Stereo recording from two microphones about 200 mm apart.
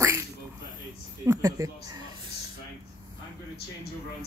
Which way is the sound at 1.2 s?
15° right (ahead or behind).